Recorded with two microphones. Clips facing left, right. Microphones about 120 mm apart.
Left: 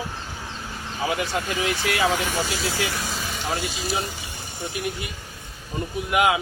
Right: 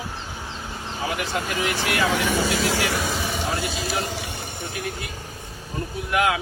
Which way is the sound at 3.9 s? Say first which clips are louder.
Right 1 dB; 70° right (ahead or behind).